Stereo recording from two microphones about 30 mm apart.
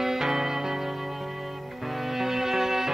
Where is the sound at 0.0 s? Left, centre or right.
Centre.